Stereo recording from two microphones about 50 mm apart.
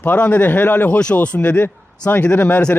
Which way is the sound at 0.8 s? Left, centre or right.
Left.